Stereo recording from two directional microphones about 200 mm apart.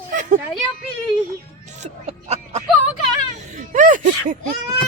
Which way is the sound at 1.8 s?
30° right (ahead or behind).